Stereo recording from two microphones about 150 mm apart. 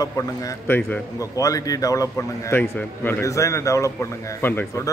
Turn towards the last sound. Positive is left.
turn(degrees=15)  # may be behind; listen again after turning